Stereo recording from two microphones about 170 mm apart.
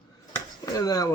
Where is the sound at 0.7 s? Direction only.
20° left (ahead or behind).